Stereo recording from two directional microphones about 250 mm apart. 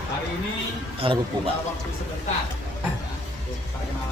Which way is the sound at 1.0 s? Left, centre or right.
Right.